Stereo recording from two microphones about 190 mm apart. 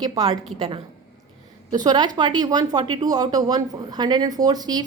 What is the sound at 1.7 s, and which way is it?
Speech, 20° right (ahead or behind).